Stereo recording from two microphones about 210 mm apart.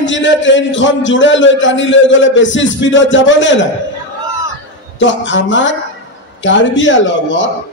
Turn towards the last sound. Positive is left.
turn(degrees=60)  # may be behind; listen again after turning